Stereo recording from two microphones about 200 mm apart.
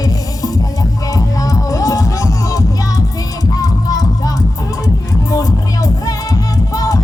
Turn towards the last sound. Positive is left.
turn(degrees=15)  # may be behind; listen again after turning